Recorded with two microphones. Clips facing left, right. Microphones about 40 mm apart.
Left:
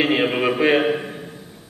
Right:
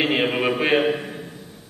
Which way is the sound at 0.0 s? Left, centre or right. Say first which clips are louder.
Left 2 dB; centre.